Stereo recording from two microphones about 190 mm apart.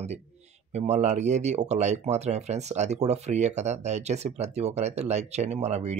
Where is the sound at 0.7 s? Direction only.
35° right (ahead or behind).